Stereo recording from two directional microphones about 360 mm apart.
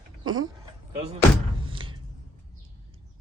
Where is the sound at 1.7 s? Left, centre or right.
Centre.